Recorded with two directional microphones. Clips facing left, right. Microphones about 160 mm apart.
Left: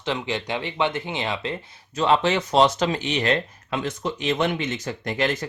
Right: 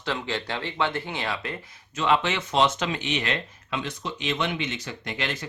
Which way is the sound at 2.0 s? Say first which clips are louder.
Left 4 dB; 35° left (ahead or behind).